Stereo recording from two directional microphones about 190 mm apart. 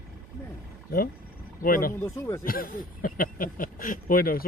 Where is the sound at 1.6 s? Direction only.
50° left (ahead or behind).